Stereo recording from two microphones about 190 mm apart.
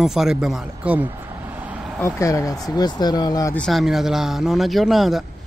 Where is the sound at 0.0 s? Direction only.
5° right (ahead or behind).